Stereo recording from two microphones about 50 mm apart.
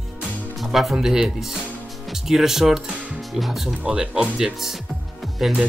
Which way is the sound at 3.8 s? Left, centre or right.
Centre.